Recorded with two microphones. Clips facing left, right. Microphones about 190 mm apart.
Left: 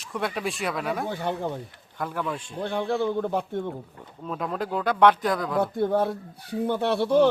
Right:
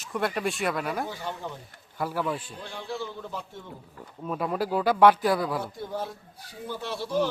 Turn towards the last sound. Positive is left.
turn(degrees=60)  # may be behind; listen again after turning